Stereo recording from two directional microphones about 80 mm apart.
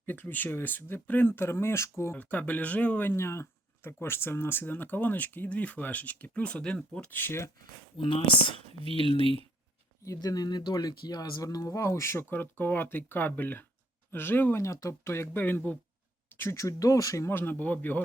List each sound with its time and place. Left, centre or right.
0.0 s speech: left
2.1 s speech: centre
3.1 s speech: left; by 7.1 s centre
7.1 s speech: left
7.9 s speech: left
10.2 s speech: left
14.6 s speech: left
17.2 s speech: left